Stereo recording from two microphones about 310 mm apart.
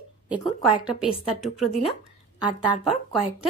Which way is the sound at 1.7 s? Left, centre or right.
Centre.